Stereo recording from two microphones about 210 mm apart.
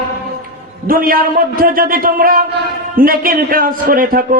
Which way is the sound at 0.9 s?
45° right (ahead or behind).